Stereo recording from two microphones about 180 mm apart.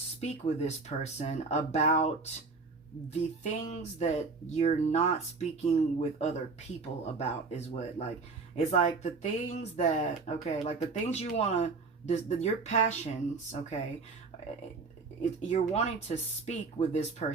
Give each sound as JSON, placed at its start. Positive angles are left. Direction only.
{"t": 0.2, "sound": "speech", "side_deg": 40}
{"t": 3.1, "sound": "speech", "side_deg": 40}
{"t": 15.2, "sound": "speech", "side_deg": 40}